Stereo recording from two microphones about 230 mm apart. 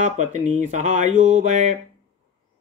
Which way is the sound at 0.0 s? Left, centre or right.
Right.